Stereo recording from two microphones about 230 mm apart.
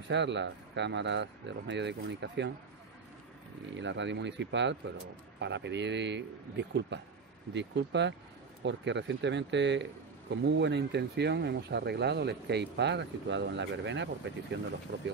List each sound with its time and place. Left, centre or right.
0.1 s speech: right
3.7 s speech: right